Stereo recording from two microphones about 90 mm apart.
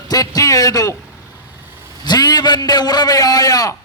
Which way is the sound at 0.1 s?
45° left (ahead or behind).